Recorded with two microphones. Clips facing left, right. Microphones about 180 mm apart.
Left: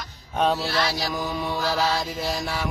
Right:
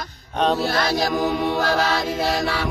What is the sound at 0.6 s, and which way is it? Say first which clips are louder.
Mantra: right 5 dB; 50° right (ahead or behind).